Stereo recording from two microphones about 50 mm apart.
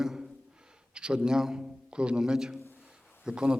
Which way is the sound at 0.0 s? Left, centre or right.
Centre.